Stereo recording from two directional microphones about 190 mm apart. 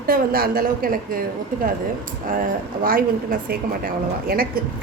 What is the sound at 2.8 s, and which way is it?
Speech, 50° right (ahead or behind).